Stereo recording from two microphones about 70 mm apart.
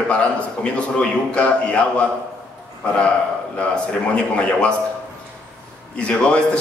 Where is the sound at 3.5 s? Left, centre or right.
Centre.